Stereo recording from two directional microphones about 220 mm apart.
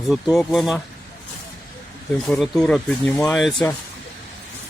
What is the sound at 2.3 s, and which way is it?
Speech, centre (ahead or behind).